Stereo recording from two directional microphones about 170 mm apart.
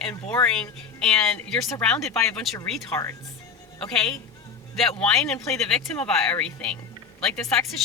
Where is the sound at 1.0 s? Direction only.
5° left (ahead or behind).